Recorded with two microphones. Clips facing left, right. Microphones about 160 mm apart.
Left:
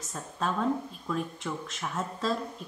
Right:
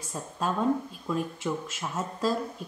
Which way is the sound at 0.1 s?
10° right (ahead or behind).